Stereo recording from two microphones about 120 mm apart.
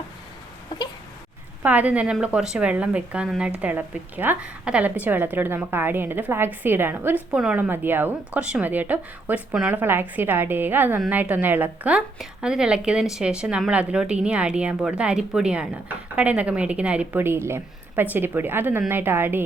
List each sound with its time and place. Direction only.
1.6 s a woman's voice: 10° right (ahead or behind)